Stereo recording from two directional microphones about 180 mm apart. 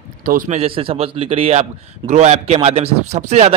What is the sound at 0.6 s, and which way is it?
A man's voice, 30° right (ahead or behind).